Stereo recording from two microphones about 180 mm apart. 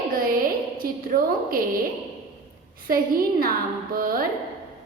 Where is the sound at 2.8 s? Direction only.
55° right (ahead or behind).